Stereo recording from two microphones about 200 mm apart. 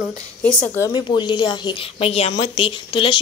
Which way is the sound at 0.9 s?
20° left (ahead or behind).